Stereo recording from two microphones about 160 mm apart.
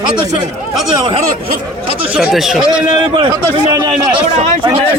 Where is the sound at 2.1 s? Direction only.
Centre (ahead or behind).